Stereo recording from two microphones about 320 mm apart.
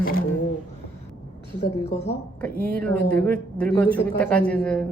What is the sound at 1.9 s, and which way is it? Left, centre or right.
Speech, centre.